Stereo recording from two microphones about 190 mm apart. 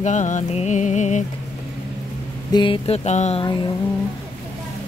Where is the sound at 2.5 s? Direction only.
25° left (ahead or behind).